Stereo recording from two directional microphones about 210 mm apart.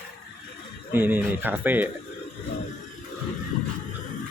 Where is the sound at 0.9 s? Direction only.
10° right (ahead or behind).